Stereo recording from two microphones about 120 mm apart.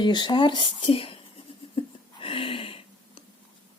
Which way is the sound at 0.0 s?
40° left (ahead or behind).